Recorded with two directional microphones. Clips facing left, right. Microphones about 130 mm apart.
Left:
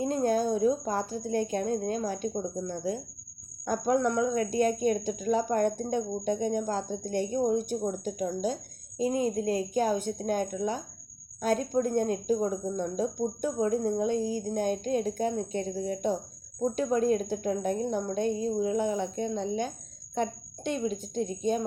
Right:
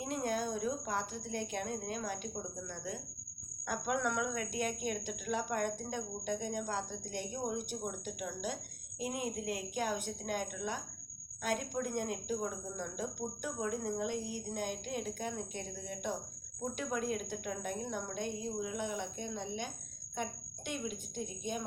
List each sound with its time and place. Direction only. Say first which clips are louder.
0.0 s speech: left 10 dB; 35° left (ahead or behind)